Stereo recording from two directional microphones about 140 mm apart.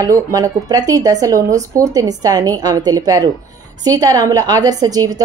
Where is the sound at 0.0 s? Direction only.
25° right (ahead or behind).